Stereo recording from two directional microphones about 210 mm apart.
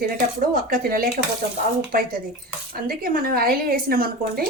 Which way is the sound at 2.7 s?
45° right (ahead or behind).